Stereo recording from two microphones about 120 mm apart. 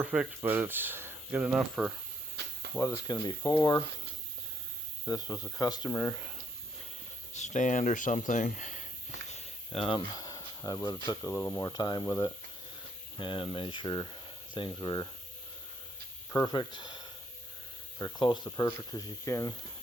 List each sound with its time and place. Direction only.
0.0 s speech: 10° right (ahead or behind)
2.7 s speech: 25° left (ahead or behind)
5.0 s speech: 30° left (ahead or behind)
7.3 s speech: 85° left
9.3 s a sound: 50° left (ahead or behind)
10.2 s snake: 30° left (ahead or behind)
10.8 s speech: 35° left (ahead or behind)
11.2 s speech: 20° left (ahead or behind)
11.6 s speech: 35° left (ahead or behind)
13.1 s speech: 45° left (ahead or behind)
16.5 s speech: 40° left (ahead or behind)